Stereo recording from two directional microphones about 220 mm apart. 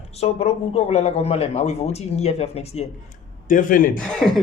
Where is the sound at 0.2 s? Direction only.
30° left (ahead or behind).